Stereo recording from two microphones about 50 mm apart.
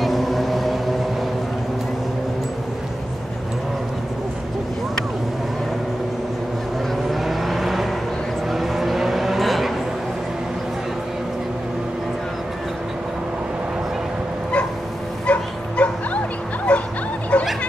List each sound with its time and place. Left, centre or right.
0.0 s vehicle: centre
7.1 s vehicle: centre
15.3 s bow-wow: left
17.3 s snicker: left